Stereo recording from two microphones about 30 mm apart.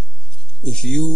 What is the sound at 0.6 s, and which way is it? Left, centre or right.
Speech, left.